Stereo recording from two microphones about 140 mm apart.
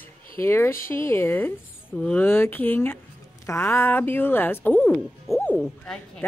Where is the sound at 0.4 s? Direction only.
20° left (ahead or behind).